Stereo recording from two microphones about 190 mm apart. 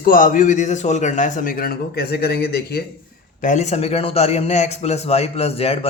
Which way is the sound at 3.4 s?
40° left (ahead or behind).